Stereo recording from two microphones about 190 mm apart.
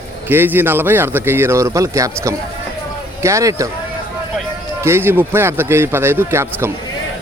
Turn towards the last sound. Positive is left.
turn(degrees=-15)  # may be behind; listen again after turning